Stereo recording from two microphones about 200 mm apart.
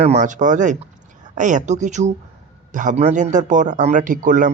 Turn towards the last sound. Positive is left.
turn(degrees=-40)  # may be behind; listen again after turning